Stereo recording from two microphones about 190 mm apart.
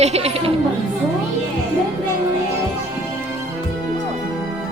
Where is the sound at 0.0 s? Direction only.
35° right (ahead or behind).